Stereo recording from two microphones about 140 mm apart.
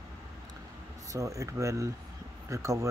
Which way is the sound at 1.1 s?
25° right (ahead or behind).